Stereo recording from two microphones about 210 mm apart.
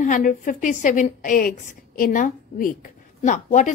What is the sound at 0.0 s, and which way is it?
A woman's voice, 40° left (ahead or behind).